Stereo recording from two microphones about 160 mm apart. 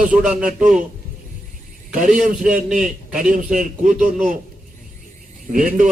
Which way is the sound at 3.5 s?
55° right (ahead or behind).